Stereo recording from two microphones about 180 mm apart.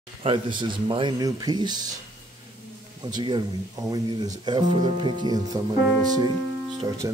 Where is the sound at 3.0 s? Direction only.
25° right (ahead or behind).